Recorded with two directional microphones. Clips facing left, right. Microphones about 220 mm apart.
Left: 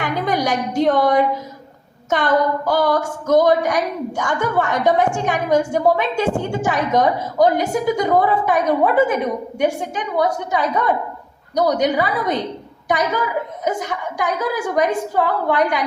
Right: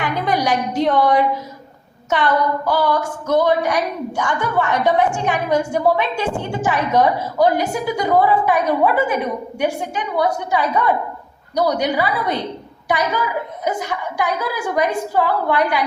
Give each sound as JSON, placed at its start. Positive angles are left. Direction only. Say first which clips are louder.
{"t": 0.0, "sound": "a woman's voice", "louder": "even", "side_deg": 45}
{"t": 13.7, "sound": "speech", "louder": "right 1 dB", "side_deg": 45}